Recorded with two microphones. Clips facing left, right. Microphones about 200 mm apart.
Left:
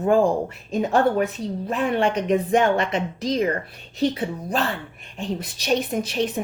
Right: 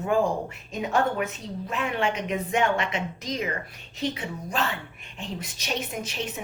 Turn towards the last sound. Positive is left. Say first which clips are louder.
# left 9 dB
turn(degrees=35)  # may be behind; listen again after turning